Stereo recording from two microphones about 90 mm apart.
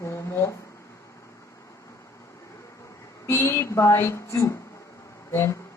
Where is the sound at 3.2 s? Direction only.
35° left (ahead or behind).